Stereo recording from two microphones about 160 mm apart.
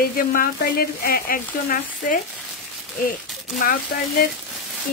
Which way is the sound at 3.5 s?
60° left (ahead or behind).